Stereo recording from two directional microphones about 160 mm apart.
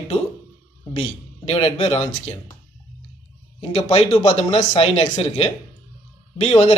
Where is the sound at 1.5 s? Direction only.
35° left (ahead or behind).